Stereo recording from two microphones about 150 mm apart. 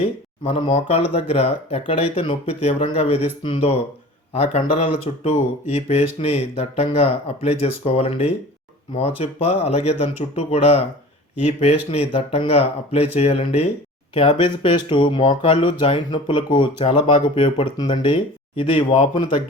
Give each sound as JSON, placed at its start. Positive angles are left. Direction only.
{"t": 0.5, "sound": "speech", "side_deg": 45}